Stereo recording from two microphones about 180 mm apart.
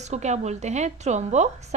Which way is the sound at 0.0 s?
40° right (ahead or behind).